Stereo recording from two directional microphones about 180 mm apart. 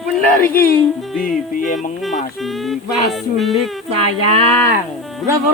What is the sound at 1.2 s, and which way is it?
Speech, 50° left (ahead or behind).